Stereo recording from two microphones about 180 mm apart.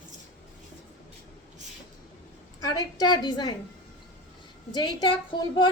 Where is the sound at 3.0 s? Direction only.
25° left (ahead or behind).